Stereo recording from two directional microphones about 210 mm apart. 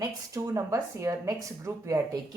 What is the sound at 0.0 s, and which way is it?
Speech, 15° right (ahead or behind).